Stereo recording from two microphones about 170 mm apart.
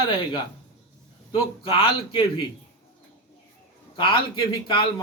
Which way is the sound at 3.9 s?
30° left (ahead or behind).